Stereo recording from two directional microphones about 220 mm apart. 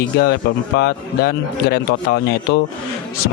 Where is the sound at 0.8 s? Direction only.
45° left (ahead or behind).